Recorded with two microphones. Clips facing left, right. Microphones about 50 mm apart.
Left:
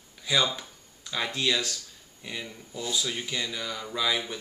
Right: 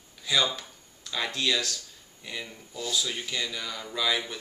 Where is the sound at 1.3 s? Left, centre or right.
Centre.